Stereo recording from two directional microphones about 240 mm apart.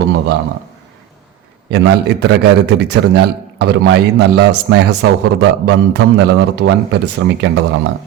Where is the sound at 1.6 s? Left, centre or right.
Right.